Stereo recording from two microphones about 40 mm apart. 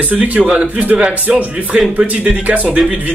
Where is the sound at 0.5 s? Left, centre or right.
Right.